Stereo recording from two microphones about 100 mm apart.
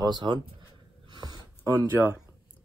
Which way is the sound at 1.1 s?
45° right (ahead or behind).